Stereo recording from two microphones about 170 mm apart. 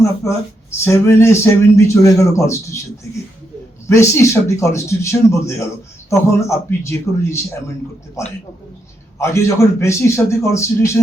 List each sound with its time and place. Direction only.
0.0 s speech: 15° left (ahead or behind)
3.8 s speech: 15° left (ahead or behind)